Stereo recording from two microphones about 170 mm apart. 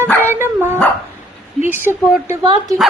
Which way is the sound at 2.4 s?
25° right (ahead or behind).